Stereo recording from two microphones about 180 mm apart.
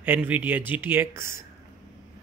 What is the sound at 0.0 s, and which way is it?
Speech, 10° right (ahead or behind).